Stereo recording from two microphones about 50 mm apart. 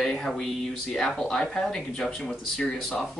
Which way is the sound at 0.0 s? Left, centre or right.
Centre.